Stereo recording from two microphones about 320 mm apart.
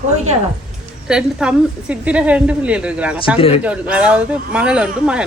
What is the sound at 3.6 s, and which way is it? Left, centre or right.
A woman's voice, centre.